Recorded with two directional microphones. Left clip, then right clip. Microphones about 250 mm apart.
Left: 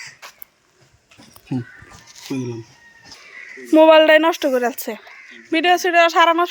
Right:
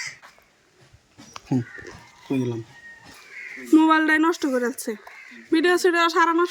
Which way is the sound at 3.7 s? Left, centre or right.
Centre.